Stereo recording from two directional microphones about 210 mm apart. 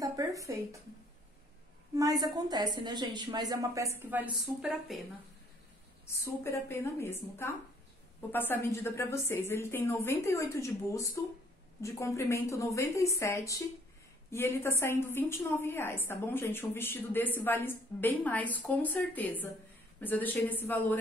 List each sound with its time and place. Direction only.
0.0 s a sound: 15° right (ahead or behind)
2.0 s a woman's voice: 15° right (ahead or behind); by 5.0 s centre (ahead or behind)
6.0 s a woman's voice: 10° left (ahead or behind)